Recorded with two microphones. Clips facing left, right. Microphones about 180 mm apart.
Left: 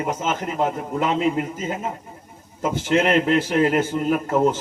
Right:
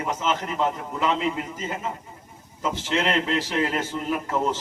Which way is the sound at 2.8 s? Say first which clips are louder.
Left 7 dB; 50° left (ahead or behind).